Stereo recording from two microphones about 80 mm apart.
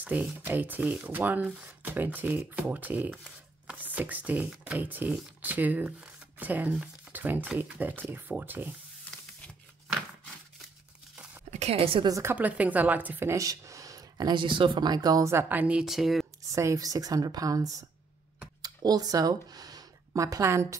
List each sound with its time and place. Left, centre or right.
0.0 s speech: right
12.3 s speech: centre
13.3 s speech: right
15.4 s speech: right
15.8 s speech: centre
16.5 s speech: right
18.6 s a sound: right
20.1 s a woman's voice: right